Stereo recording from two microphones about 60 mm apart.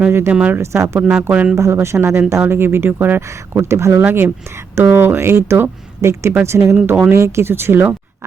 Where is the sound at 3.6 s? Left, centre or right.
Right.